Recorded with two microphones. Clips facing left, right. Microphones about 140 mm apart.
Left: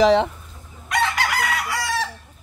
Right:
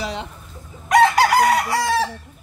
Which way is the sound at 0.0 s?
90° left.